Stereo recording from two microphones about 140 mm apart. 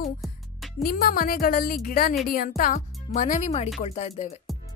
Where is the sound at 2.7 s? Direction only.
60° left (ahead or behind).